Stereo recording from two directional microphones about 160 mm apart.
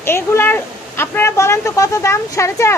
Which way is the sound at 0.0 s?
15° left (ahead or behind).